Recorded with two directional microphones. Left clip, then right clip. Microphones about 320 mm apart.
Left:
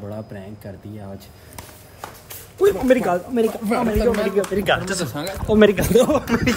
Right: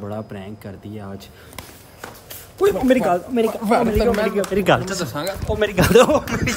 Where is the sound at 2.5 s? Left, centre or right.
Centre.